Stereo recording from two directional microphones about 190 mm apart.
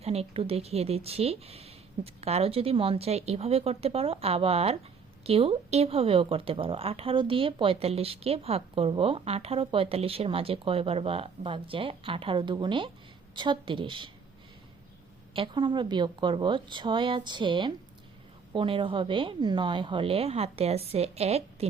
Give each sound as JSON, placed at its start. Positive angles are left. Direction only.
{"t": 0.0, "sound": "speech", "side_deg": -35}
{"t": 15.3, "sound": "speech", "side_deg": -25}